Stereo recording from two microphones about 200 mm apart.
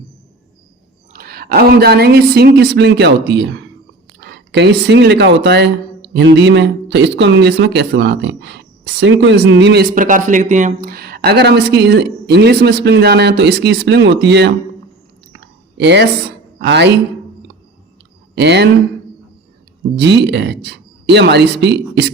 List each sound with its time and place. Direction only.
1.1 s a woman's voice: 50° right (ahead or behind)
9.9 s speech: 40° right (ahead or behind); by 14.5 s 60° right (ahead or behind)
15.8 s speech: 60° right (ahead or behind)
18.3 s speech: 60° right (ahead or behind)
20.0 s speech: 60° right (ahead or behind)